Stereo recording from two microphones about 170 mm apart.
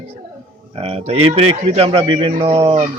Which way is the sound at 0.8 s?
35° right (ahead or behind).